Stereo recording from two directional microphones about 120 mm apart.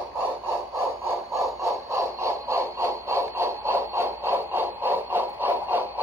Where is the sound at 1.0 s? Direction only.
25° right (ahead or behind).